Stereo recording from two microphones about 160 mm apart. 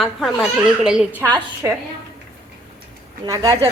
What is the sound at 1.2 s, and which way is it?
Speech, 15° right (ahead or behind).